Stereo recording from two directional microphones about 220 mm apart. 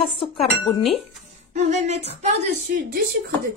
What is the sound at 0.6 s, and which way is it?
Speech, centre (ahead or behind).